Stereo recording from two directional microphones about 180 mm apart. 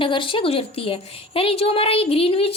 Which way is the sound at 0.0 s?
30° left (ahead or behind).